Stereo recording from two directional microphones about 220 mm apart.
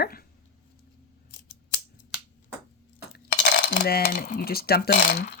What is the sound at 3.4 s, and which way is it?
Speech, 50° left (ahead or behind).